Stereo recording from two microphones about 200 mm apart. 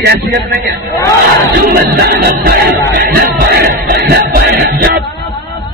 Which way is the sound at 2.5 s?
50° right (ahead or behind).